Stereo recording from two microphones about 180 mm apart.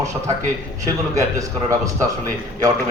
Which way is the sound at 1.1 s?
20° right (ahead or behind).